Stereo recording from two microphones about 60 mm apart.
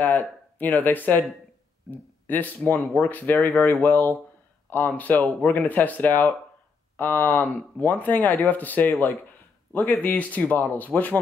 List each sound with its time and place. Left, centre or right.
0.0 s speech: left